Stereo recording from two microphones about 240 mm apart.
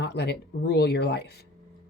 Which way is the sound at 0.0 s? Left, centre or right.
Left.